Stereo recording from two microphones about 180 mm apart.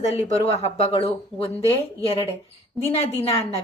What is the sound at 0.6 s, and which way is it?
Speech, 35° left (ahead or behind).